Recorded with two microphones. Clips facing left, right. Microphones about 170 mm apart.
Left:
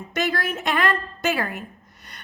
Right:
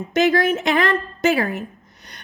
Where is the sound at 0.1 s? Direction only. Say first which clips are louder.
Right 8 dB; 45° right (ahead or behind).